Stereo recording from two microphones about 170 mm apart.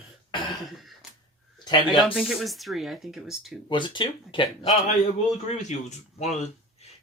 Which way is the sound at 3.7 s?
30° left (ahead or behind).